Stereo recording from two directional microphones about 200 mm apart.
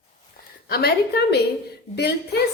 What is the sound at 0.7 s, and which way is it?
A woman's voice, 50° left (ahead or behind).